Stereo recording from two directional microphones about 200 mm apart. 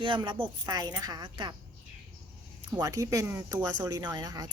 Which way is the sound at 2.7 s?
15° right (ahead or behind).